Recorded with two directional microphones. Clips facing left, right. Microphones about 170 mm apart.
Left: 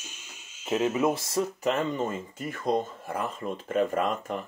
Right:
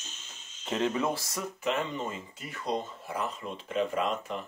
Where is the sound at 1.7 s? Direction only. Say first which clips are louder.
Left 1 dB; 45° left (ahead or behind).